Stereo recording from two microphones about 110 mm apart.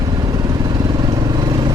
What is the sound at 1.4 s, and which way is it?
Vehicle, 35° right (ahead or behind).